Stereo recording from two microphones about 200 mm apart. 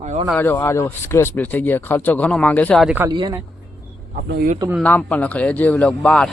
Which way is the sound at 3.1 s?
20° right (ahead or behind).